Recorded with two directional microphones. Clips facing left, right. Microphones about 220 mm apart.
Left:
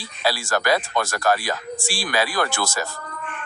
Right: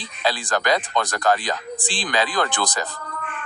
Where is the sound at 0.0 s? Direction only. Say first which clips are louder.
Even; 20° right (ahead or behind).